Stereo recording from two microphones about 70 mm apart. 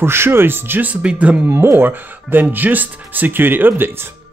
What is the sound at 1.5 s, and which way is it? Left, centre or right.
Speech, right.